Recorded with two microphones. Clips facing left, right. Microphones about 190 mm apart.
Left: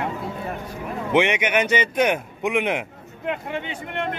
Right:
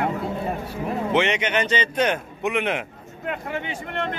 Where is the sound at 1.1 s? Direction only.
10° left (ahead or behind).